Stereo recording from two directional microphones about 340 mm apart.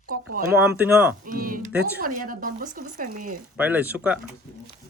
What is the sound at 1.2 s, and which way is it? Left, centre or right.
Speech, right.